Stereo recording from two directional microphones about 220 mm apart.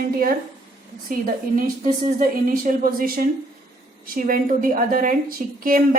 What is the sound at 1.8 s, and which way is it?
A woman's voice, 35° right (ahead or behind).